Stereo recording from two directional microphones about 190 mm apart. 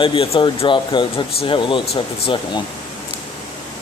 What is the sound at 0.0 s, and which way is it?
Speech, 25° left (ahead or behind).